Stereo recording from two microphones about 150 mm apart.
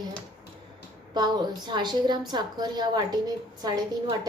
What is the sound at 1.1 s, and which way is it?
A woman's voice, 30° right (ahead or behind).